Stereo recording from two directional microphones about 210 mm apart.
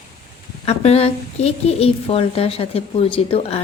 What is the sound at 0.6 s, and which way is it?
A woman's voice, 30° left (ahead or behind).